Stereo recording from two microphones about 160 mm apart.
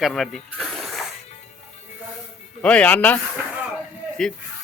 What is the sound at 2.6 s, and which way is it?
Speech, 10° left (ahead or behind).